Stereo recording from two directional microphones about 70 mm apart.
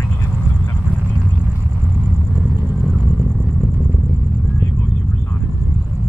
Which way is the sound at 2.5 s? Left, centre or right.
Right.